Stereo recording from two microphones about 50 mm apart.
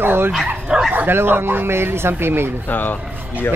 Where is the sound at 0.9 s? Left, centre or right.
Right.